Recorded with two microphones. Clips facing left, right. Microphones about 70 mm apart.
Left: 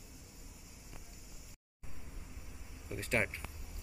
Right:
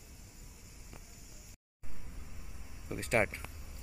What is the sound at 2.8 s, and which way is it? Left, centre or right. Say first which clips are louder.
Speech: right 4 dB; right.